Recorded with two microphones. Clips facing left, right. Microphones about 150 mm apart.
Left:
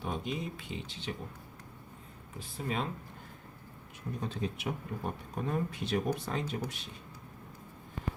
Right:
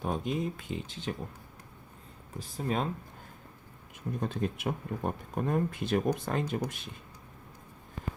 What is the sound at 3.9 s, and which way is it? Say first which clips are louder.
Speech: right 4 dB; 50° right (ahead or behind).